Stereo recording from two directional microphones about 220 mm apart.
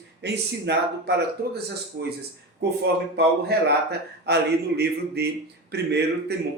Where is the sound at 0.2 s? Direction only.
50° right (ahead or behind).